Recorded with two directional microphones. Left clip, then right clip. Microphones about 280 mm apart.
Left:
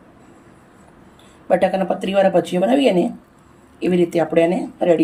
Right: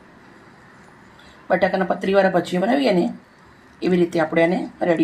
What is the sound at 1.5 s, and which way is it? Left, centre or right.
Speech, centre.